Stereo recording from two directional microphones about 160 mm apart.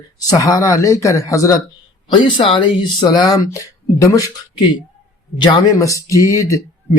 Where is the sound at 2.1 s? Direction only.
30° left (ahead or behind).